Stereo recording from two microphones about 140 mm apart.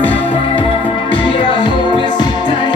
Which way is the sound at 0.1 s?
40° left (ahead or behind).